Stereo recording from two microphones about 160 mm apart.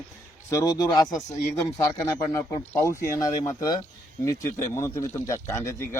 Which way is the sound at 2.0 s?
20° left (ahead or behind).